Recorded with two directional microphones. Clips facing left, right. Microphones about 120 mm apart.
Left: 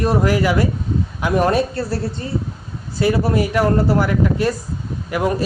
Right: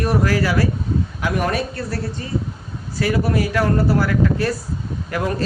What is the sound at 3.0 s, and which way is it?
Speech, 25° left (ahead or behind).